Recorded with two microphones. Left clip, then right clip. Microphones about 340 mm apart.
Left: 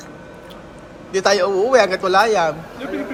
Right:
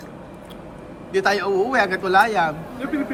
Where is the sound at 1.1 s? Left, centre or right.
Centre.